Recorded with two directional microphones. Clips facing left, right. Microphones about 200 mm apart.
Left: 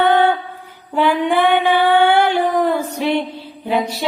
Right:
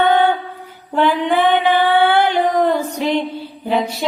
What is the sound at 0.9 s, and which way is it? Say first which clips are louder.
Female singing: even; 10° left (ahead or behind).